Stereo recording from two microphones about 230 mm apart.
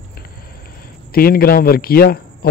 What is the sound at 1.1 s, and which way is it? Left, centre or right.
Speech, left.